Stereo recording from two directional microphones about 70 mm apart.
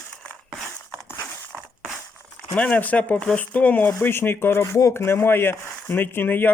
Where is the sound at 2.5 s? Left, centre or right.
Left.